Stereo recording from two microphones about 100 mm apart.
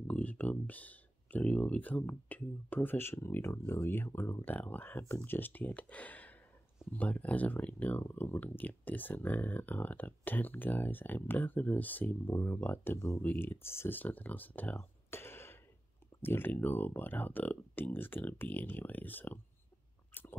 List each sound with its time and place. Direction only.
0.0 s speech: 15° left (ahead or behind)
15.0 s a sound: 25° left (ahead or behind)
16.2 s speech: 20° left (ahead or behind)
20.1 s chewing: 20° left (ahead or behind)